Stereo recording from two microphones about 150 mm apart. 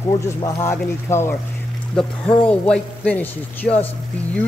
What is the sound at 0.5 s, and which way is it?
Speech, 15° left (ahead or behind).